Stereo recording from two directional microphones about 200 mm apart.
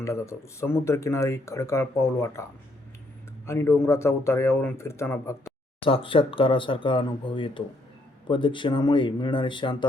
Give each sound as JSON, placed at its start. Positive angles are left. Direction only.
{"t": 0.0, "sound": "speech", "side_deg": 15}
{"t": 5.8, "sound": "speech", "side_deg": 25}